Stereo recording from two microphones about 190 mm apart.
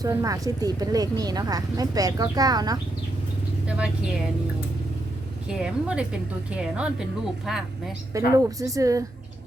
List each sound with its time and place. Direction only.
0.0 s speech: 20° right (ahead or behind)
3.7 s speech: 5° right (ahead or behind)
5.5 s speech: 5° right (ahead or behind)
8.1 s speech: 15° right (ahead or behind)